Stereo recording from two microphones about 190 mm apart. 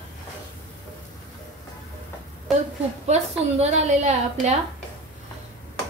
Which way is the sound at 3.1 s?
35° right (ahead or behind).